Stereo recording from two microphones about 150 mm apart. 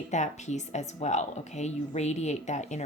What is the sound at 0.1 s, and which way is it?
A woman's voice, 50° left (ahead or behind).